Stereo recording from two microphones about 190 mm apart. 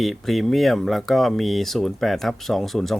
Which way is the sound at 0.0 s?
Centre (ahead or behind).